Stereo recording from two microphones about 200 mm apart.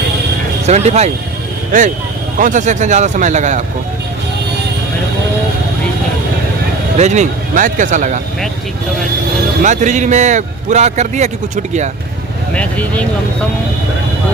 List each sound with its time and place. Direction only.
0.6 s a man's voice: 35° right (ahead or behind)
2.4 s a man's voice: 40° right (ahead or behind)
6.9 s a man's voice: 35° right (ahead or behind)
9.6 s a man's voice: 35° right (ahead or behind)
12.5 s speech: 5° left (ahead or behind)